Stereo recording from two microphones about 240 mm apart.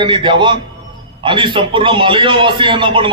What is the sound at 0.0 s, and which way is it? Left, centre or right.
A man's voice, centre.